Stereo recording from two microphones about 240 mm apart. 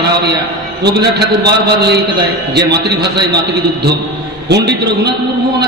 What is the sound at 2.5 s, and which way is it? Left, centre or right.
Speech, right.